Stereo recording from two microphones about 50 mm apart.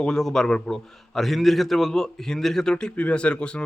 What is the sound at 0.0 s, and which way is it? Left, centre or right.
Speech, centre.